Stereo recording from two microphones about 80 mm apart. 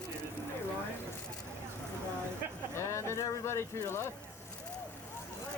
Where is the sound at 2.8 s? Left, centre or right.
Left.